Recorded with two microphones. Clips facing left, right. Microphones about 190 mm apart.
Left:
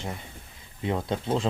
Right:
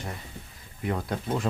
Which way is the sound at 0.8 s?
25° left (ahead or behind).